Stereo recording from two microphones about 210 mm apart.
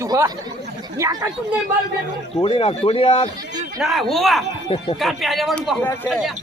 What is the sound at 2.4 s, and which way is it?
Speech, 30° left (ahead or behind).